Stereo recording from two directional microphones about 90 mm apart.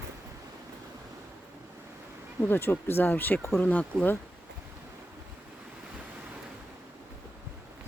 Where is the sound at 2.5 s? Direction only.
25° left (ahead or behind).